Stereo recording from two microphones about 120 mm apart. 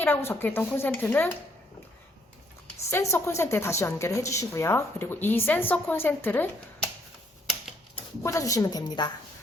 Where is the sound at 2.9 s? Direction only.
20° left (ahead or behind).